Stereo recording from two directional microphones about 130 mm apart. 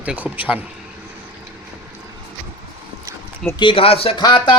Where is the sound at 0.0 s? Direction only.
10° right (ahead or behind).